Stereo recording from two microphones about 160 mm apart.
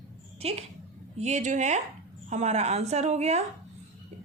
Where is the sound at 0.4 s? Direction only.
40° right (ahead or behind).